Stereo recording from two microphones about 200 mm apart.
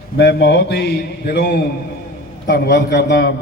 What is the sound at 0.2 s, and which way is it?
A man's voice, 55° left (ahead or behind).